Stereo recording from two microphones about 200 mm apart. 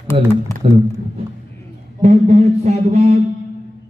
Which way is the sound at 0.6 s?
25° right (ahead or behind).